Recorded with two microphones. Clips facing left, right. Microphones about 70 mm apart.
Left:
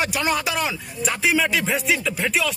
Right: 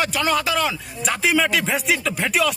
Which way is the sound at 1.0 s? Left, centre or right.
Centre.